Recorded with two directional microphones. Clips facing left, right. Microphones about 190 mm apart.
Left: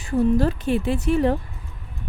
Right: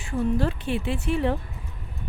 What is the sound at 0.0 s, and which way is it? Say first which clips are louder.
A woman's voice: left 5 dB; 40° left (ahead or behind).